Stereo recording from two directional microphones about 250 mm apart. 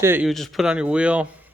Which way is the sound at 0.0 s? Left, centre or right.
Centre.